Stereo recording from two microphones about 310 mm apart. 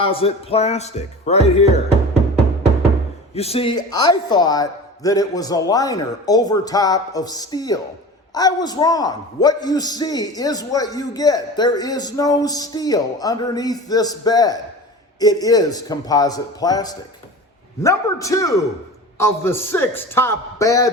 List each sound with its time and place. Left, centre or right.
0.0 s speech: centre
3.3 s a man's voice: centre